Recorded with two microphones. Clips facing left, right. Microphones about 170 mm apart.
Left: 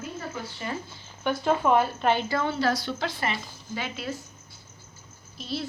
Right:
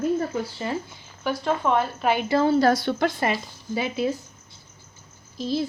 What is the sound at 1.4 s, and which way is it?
Speech, 5° left (ahead or behind).